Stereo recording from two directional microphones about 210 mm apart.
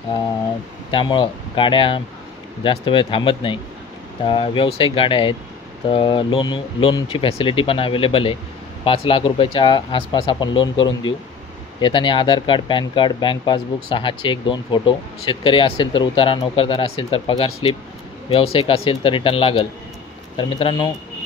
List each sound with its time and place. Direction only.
0.9 s speech: 20° left (ahead or behind)